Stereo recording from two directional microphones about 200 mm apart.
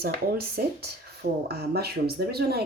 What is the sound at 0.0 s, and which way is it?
Speech, 50° right (ahead or behind).